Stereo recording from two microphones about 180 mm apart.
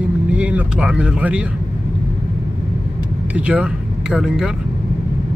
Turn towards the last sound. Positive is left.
turn(degrees=-5)  # may be behind; listen again after turning